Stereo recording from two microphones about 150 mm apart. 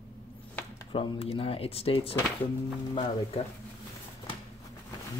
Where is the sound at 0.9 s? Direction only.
40° left (ahead or behind).